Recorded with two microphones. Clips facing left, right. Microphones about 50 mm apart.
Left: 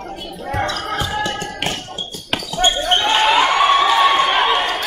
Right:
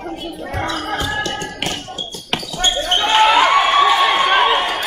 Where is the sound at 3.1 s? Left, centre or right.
Centre.